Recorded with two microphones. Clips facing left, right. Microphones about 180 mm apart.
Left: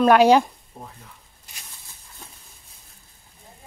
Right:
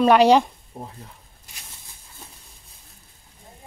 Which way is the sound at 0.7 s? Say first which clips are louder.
Right 4 dB; 20° right (ahead or behind).